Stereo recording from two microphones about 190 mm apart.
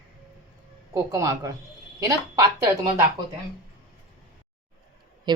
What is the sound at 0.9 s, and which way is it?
A woman's voice, 15° right (ahead or behind).